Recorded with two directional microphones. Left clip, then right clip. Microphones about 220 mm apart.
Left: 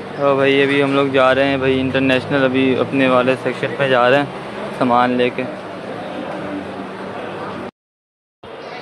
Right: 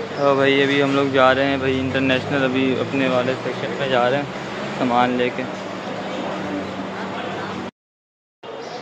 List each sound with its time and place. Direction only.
0.2 s speech: 5° left (ahead or behind); by 4.2 s 25° left (ahead or behind)
4.9 s speech: 15° left (ahead or behind)